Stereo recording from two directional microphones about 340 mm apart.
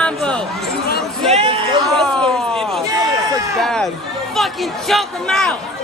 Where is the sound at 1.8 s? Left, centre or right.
Centre.